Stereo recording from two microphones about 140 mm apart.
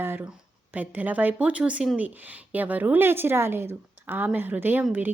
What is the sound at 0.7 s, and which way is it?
A woman's voice, 10° right (ahead or behind).